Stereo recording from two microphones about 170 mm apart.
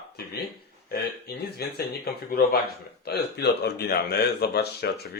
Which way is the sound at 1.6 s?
65° left (ahead or behind).